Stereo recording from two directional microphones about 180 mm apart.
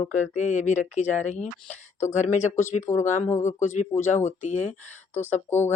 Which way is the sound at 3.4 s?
40° left (ahead or behind).